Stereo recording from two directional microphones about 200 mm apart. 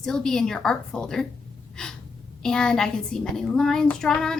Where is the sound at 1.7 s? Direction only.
5° left (ahead or behind).